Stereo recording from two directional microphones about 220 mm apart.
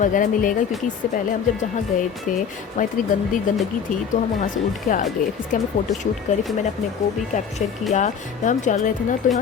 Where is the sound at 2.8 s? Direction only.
35° left (ahead or behind).